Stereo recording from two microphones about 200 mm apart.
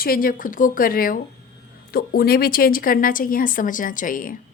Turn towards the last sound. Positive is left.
turn(degrees=45)  # may be behind; listen again after turning